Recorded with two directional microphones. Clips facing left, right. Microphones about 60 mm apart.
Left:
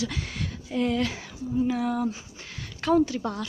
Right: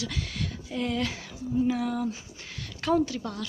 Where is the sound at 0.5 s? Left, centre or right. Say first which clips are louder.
Left 6 dB; centre.